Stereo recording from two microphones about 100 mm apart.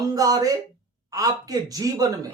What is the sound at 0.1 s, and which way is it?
Speech, 40° right (ahead or behind).